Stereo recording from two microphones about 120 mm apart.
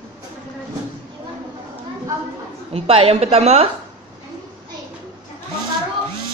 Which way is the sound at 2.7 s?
55° right (ahead or behind).